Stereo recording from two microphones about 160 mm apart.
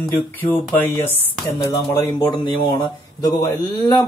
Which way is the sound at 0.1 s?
10° left (ahead or behind).